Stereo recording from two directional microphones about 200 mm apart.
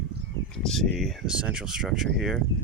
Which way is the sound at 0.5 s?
Centre (ahead or behind).